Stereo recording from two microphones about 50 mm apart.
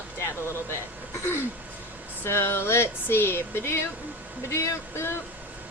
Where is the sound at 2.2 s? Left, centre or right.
Left.